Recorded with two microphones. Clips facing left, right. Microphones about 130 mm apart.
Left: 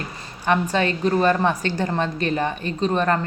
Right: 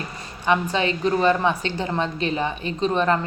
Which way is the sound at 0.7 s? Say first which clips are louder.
Left 1 dB; 45° left (ahead or behind).